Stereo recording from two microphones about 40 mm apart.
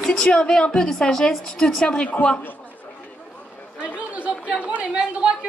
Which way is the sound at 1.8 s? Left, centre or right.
Left.